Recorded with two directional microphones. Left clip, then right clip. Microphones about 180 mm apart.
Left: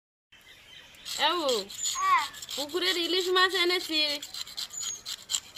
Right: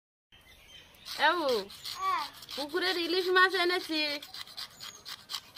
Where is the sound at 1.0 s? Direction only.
5° right (ahead or behind).